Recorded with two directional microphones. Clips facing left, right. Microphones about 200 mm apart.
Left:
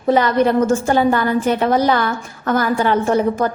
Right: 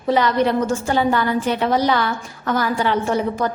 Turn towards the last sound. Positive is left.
turn(degrees=50)  # may be behind; listen again after turning